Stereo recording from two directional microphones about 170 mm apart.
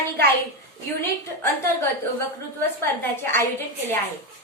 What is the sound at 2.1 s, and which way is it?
A woman's voice, 15° left (ahead or behind).